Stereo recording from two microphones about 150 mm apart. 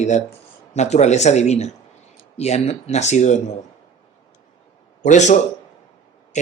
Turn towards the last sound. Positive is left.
turn(degrees=55)  # may be behind; listen again after turning